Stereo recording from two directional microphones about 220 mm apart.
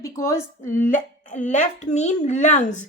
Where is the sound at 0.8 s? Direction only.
35° left (ahead or behind).